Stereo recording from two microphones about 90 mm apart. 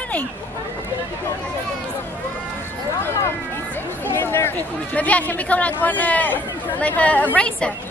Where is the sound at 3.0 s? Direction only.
30° left (ahead or behind).